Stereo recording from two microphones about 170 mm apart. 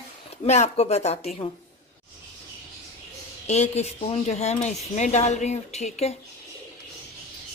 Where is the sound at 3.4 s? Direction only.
40° left (ahead or behind).